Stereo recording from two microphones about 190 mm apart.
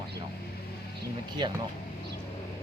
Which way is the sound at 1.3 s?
25° right (ahead or behind).